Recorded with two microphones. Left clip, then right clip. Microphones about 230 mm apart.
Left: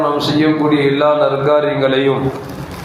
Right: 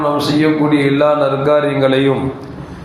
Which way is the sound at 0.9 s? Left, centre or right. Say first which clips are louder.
Even; right.